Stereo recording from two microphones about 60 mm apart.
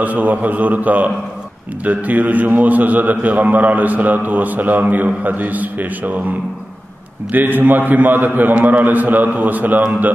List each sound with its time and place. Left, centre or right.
0.0 s a man's voice: right
7.3 s a man's voice: right